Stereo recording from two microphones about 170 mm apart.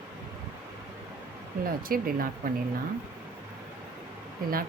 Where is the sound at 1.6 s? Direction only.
60° right (ahead or behind).